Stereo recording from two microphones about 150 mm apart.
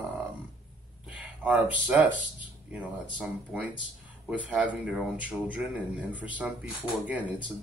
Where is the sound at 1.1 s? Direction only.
10° right (ahead or behind).